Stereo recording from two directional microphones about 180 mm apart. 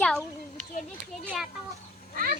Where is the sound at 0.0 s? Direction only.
5° left (ahead or behind).